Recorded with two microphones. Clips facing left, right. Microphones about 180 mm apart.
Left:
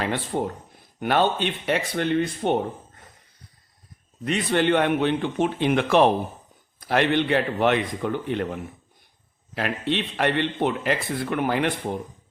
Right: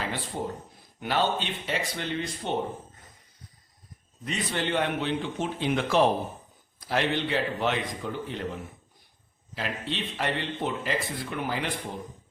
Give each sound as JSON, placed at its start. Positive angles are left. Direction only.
{"t": 0.0, "sound": "speech", "side_deg": 60}
{"t": 4.3, "sound": "speech", "side_deg": 60}
{"t": 9.6, "sound": "speech", "side_deg": 60}